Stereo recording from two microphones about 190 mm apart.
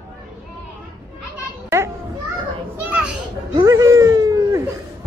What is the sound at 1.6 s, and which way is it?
Children playing, 15° right (ahead or behind).